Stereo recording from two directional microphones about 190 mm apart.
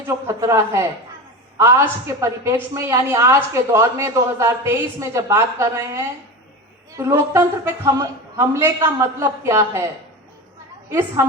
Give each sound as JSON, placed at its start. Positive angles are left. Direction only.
{"t": 0.3, "sound": "a woman's voice", "side_deg": -15}
{"t": 10.8, "sound": "a woman's voice", "side_deg": -15}